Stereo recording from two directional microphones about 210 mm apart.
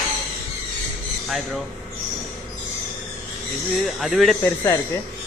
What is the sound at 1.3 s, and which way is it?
Speech, centre (ahead or behind).